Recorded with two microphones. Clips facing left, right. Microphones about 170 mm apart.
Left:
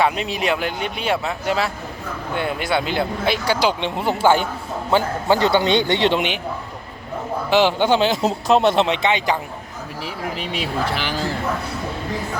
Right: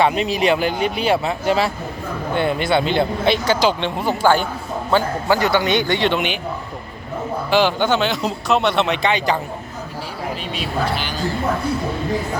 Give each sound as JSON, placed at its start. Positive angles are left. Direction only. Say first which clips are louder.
{"t": 0.0, "sound": "a man's voice", "louder": "right 3 dB", "side_deg": 0}
{"t": 7.5, "sound": "a man's voice", "louder": "left 1 dB", "side_deg": 25}
{"t": 9.0, "sound": "a man's voice", "louder": "right 1 dB", "side_deg": 20}